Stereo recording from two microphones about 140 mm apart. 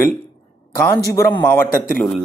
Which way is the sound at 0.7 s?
15° left (ahead or behind).